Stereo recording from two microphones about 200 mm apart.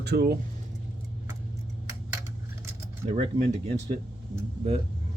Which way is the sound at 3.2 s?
30° right (ahead or behind).